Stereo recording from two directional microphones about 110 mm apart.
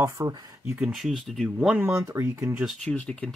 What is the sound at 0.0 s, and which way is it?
Speech, 30° right (ahead or behind).